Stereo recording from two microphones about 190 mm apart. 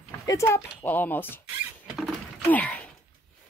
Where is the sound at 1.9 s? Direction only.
5° left (ahead or behind).